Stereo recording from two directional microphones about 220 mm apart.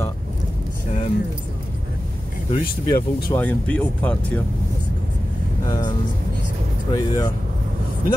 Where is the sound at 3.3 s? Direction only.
5° left (ahead or behind).